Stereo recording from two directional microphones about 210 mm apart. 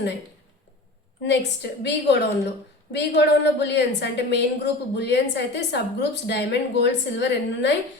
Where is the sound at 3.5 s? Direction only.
55° left (ahead or behind).